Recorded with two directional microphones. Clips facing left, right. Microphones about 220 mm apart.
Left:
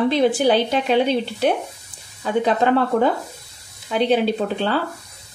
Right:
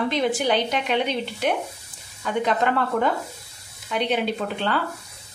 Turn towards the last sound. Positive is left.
turn(degrees=35)  # may be behind; listen again after turning